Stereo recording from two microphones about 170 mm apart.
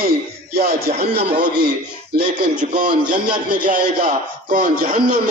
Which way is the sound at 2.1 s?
50° right (ahead or behind).